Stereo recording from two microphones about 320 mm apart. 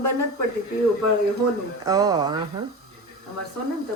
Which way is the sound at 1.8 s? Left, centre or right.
Centre.